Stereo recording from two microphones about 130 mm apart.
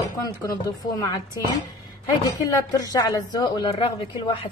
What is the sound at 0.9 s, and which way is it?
Speech, 25° left (ahead or behind).